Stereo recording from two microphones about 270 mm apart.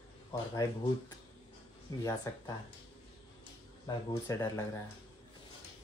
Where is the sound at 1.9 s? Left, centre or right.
Centre.